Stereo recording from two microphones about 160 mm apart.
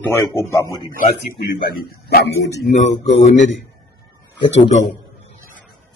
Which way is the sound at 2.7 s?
50° left (ahead or behind).